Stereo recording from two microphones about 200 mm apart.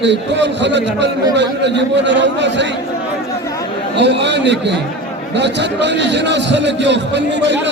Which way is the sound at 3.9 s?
60° right (ahead or behind).